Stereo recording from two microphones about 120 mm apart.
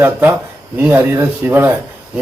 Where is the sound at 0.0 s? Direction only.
15° right (ahead or behind).